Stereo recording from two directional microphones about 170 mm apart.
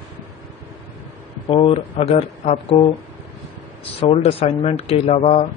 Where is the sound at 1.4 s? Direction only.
30° left (ahead or behind).